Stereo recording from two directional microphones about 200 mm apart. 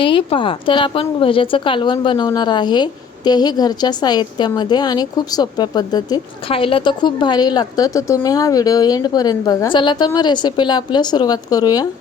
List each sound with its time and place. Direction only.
0.0 s speech: 25° left (ahead or behind)